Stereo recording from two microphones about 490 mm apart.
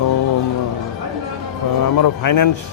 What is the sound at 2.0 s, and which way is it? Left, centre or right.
Speech, left.